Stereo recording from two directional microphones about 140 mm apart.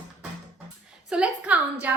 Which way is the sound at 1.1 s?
10° right (ahead or behind).